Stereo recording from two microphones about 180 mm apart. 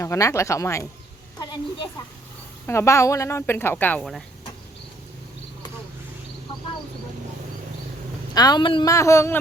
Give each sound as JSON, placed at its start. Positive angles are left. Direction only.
{"t": 0.0, "sound": "a woman's voice", "side_deg": 15}
{"t": 8.3, "sound": "speech", "side_deg": 20}